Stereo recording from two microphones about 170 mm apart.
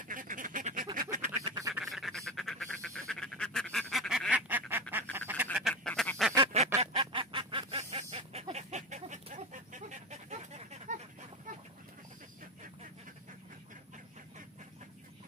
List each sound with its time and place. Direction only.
0.0 s duck: 50° right (ahead or behind)
0.9 s quack: 50° right (ahead or behind)
1.4 s duck: 20° right (ahead or behind)
1.9 s duck: centre (ahead or behind)
4.5 s duck: 10° right (ahead or behind)
5.5 s duck: centre (ahead or behind)
6.3 s a sound: 35° right (ahead or behind)